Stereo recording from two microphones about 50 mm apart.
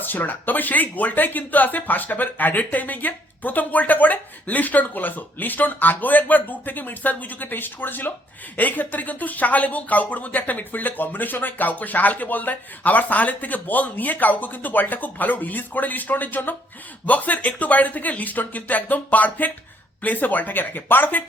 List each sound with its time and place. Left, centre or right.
0.0 s speech: left